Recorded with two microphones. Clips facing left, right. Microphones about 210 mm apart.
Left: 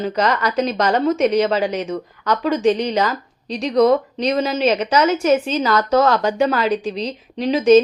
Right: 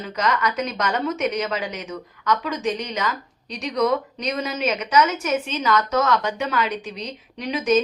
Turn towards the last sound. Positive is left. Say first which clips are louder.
# left 8 dB
turn(degrees=30)  # may be behind; listen again after turning